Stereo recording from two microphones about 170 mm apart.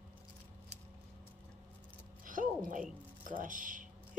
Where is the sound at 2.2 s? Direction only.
50° right (ahead or behind).